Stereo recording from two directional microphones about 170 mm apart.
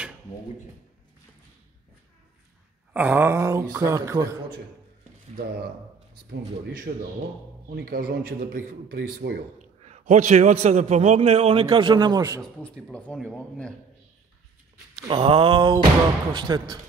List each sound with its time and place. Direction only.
2.9 s a sound: 10° right (ahead or behind)
6.9 s speech: 45° right (ahead or behind)
7.7 s a man's voice: 65° right (ahead or behind)
9.6 s a man's voice: 45° right (ahead or behind); by 12.4 s 20° right (ahead or behind)
12.8 s speech: 5° left (ahead or behind)
15.0 s a man's voice: 30° right (ahead or behind)